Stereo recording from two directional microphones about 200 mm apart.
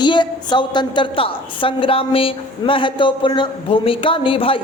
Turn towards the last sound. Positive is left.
turn(degrees=25)  # may be behind; listen again after turning